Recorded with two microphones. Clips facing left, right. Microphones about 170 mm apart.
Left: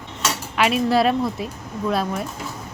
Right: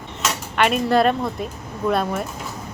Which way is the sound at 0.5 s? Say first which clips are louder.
Right 1 dB; centre (ahead or behind).